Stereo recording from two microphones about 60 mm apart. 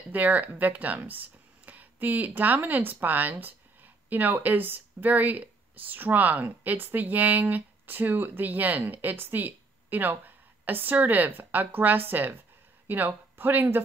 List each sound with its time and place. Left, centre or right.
0.1 s speech: right